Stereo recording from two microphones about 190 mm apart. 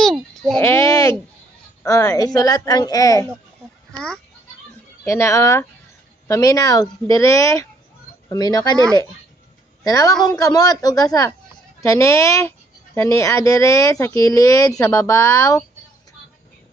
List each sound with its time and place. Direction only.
0.0 s a sound: centre (ahead or behind); by 1.1 s 15° left (ahead or behind)
1.8 s a woman's voice: 20° left (ahead or behind)
3.9 s speech: 25° right (ahead or behind)
5.0 s a woman's voice: 15° left (ahead or behind)
9.8 s a woman's voice: 20° left (ahead or behind)